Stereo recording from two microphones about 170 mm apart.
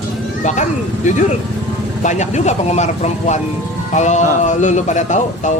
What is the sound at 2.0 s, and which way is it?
Speech, 45° left (ahead or behind).